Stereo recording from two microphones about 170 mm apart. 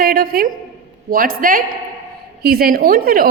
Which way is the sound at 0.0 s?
55° right (ahead or behind).